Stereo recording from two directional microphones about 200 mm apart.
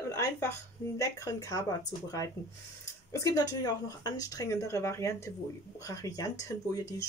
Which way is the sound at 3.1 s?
15° left (ahead or behind).